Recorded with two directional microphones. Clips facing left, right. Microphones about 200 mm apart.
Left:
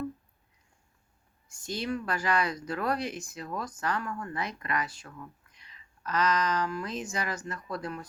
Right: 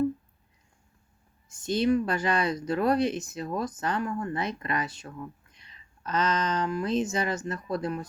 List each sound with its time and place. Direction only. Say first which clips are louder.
1.5 s speech: right 9 dB; 20° right (ahead or behind)